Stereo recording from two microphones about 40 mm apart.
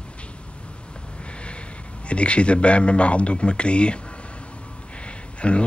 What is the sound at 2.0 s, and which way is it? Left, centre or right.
A man's voice, left.